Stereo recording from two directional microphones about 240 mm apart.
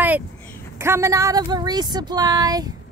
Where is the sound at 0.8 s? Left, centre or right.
Centre.